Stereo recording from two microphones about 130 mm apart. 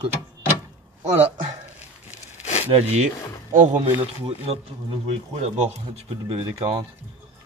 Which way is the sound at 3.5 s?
75° right (ahead or behind).